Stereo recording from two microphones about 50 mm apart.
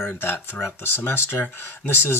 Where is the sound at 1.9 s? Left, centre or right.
Left.